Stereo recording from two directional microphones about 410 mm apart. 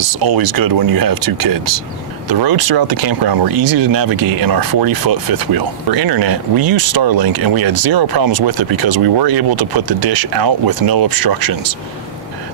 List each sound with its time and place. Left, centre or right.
0.2 s speech: right